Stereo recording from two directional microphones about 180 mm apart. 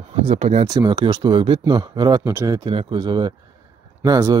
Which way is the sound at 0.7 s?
25° right (ahead or behind).